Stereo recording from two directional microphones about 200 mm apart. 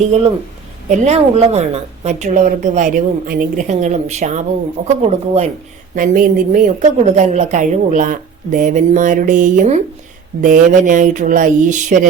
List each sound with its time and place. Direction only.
0.9 s a woman's voice: 35° right (ahead or behind)
5.9 s a woman's voice: 45° right (ahead or behind)